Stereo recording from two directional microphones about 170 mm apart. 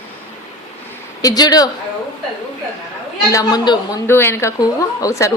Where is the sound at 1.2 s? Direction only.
25° left (ahead or behind).